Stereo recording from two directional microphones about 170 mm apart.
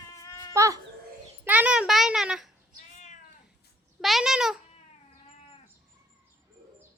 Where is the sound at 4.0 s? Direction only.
Centre (ahead or behind).